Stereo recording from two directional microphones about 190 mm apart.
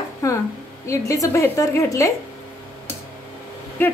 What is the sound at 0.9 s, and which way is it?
A woman's voice, 15° left (ahead or behind).